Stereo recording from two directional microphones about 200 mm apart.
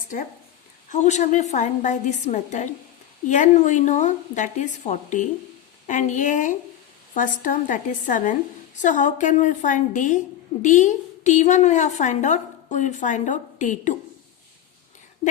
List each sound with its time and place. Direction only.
0.9 s a woman's voice: 35° left (ahead or behind)